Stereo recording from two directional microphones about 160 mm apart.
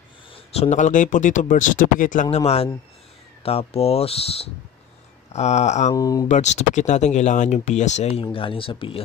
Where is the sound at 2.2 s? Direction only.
40° left (ahead or behind).